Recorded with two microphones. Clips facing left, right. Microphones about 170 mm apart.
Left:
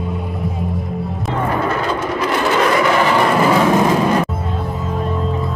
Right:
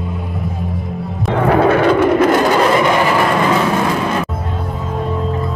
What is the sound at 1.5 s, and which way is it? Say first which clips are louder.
Vehicle: right 9 dB; 65° right (ahead or behind).